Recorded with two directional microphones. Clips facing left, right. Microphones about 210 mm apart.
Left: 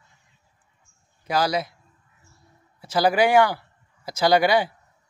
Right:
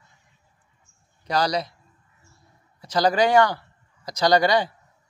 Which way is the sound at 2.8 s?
5° left (ahead or behind).